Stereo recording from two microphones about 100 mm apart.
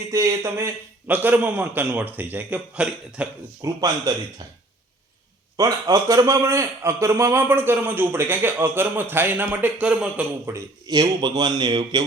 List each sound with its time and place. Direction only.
0.1 s a man's voice: 35° right (ahead or behind); by 3.2 s 10° right (ahead or behind)
3.6 s a man's voice: 40° right (ahead or behind)
5.5 s a man's voice: 35° right (ahead or behind); by 10.2 s 10° right (ahead or behind)
10.5 s a man's voice: 25° right (ahead or behind)
10.8 s a man's voice: 40° right (ahead or behind)